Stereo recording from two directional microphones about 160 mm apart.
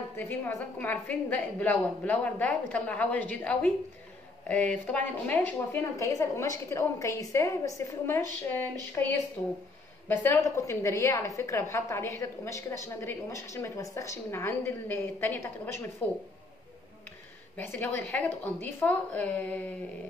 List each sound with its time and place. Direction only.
0.2 s a woman's voice: 10° left (ahead or behind)
17.6 s a woman's voice: 10° left (ahead or behind)